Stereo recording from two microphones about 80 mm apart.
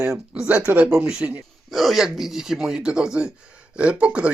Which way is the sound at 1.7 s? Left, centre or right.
Centre.